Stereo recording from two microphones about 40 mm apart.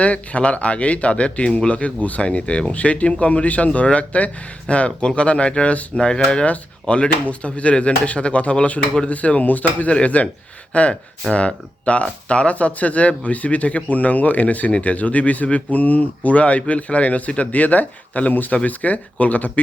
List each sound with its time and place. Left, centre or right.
0.0 s speech: left
2.2 s speech: left